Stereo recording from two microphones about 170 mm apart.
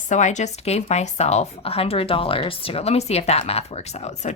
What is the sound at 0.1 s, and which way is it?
Speech, 45° left (ahead or behind).